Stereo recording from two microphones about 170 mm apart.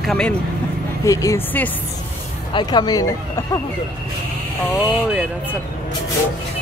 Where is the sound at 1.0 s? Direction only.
20° left (ahead or behind).